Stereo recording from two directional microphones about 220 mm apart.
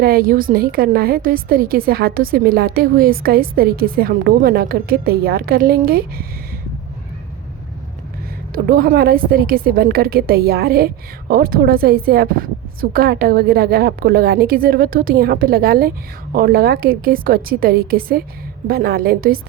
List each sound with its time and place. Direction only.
0.0 s a woman's voice: 40° right (ahead or behind)
8.5 s a woman's voice: 40° right (ahead or behind)